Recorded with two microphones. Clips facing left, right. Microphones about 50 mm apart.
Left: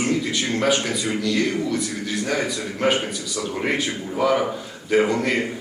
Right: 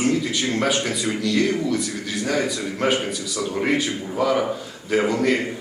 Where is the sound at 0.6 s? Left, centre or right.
Centre.